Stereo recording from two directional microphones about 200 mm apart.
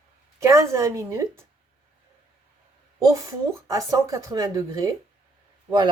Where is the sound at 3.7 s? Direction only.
15° right (ahead or behind).